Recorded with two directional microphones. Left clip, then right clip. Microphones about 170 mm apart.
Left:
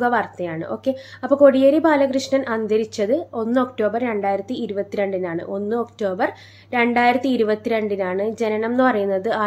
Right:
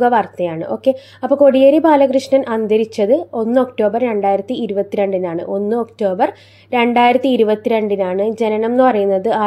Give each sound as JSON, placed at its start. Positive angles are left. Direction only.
{"t": 0.0, "sound": "a woman's voice", "side_deg": -25}